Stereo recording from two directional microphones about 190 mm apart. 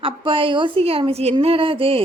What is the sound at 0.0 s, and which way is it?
A woman's voice, 30° right (ahead or behind).